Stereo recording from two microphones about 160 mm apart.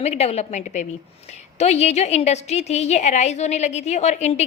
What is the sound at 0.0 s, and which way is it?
A woman's voice, 40° left (ahead or behind).